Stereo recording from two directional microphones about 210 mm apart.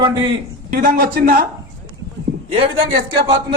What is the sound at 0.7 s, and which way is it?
Speech, 45° right (ahead or behind).